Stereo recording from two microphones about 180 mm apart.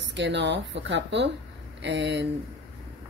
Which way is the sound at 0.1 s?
75° right (ahead or behind).